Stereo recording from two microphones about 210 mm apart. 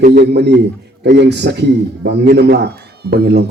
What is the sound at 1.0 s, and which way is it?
A man's voice, 55° right (ahead or behind).